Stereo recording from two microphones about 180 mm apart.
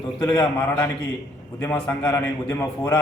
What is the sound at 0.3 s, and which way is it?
A man's voice, 10° left (ahead or behind).